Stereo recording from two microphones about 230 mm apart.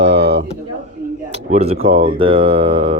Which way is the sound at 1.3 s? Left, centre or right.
Right.